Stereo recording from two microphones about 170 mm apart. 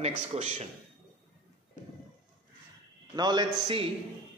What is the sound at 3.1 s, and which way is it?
Speech, 25° right (ahead or behind).